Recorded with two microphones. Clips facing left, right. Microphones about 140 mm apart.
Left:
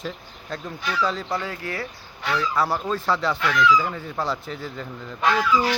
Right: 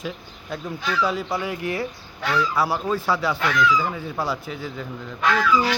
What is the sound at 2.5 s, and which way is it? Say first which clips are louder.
Speech: right 1 dB; 5° right (ahead or behind).